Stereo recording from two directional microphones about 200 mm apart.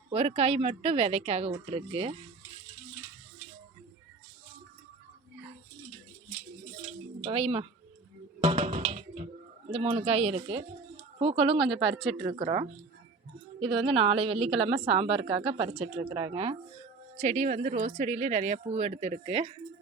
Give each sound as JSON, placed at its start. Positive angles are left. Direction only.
{"t": 0.1, "sound": "a woman's voice", "side_deg": -30}
{"t": 6.8, "sound": "drip", "side_deg": -30}
{"t": 8.4, "sound": "music", "side_deg": -30}
{"t": 9.7, "sound": "a woman's voice", "side_deg": -30}
{"t": 11.7, "sound": "speech", "side_deg": 0}
{"t": 12.2, "sound": "a woman's voice", "side_deg": -30}
{"t": 17.2, "sound": "speech", "side_deg": -40}